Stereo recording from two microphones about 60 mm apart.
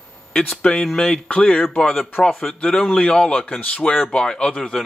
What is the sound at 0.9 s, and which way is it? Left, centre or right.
Speech, centre.